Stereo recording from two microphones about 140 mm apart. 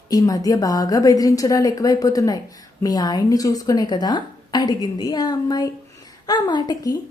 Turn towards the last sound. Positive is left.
turn(degrees=30)  # may be behind; listen again after turning